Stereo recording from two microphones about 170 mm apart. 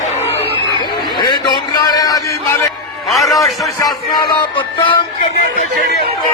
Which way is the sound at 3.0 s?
Centre (ahead or behind).